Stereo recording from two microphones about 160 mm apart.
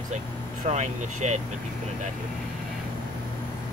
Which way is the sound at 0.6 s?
45° right (ahead or behind).